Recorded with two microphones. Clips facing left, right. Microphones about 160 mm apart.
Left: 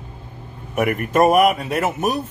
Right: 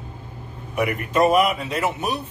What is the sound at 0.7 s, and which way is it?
A man's voice, 50° left (ahead or behind).